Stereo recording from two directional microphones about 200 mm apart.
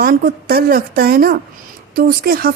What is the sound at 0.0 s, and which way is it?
A woman's voice, 50° right (ahead or behind).